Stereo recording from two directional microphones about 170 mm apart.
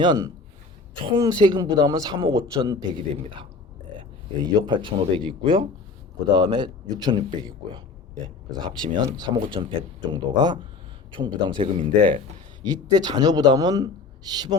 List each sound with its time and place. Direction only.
0.0 s speech: 25° right (ahead or behind)
4.6 s speech: 30° right (ahead or behind)